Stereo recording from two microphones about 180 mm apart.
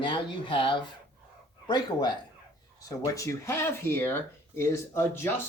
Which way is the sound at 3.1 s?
15° left (ahead or behind).